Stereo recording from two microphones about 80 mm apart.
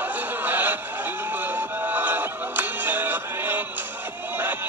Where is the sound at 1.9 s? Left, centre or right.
Right.